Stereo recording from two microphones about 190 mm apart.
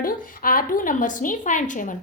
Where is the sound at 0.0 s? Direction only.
45° left (ahead or behind).